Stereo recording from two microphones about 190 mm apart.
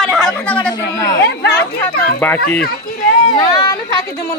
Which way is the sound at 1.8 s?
10° left (ahead or behind).